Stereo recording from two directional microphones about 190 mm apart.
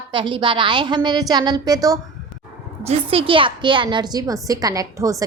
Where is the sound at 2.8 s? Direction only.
30° right (ahead or behind).